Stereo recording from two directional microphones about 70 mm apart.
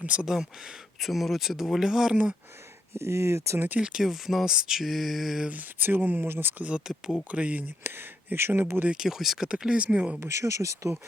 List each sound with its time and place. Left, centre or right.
0.0 s speech: centre
0.9 s speech: centre
2.9 s speech: right
3.8 s speech: centre
5.5 s speech: right
6.7 s speech: centre
7.9 s speech: right
8.9 s speech: centre
10.2 s speech: right